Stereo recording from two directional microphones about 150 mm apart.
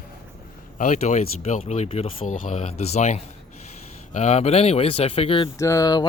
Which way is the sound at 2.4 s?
40° left (ahead or behind).